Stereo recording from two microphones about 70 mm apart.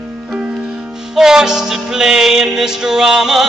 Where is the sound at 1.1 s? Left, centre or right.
Centre.